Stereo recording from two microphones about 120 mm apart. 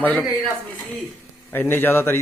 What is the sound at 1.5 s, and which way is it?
Speech, 20° left (ahead or behind).